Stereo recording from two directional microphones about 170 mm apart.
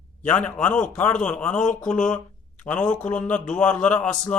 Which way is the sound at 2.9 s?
5° left (ahead or behind).